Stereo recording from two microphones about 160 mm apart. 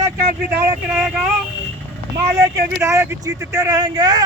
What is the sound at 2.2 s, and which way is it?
Speech, 15° right (ahead or behind).